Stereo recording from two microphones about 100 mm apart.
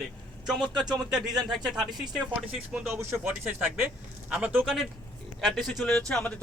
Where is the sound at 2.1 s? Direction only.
5° right (ahead or behind).